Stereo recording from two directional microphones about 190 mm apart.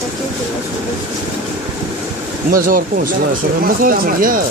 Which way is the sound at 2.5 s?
45° right (ahead or behind).